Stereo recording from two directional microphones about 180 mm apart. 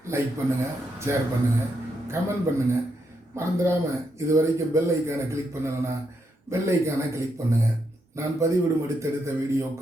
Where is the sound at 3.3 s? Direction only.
15° right (ahead or behind).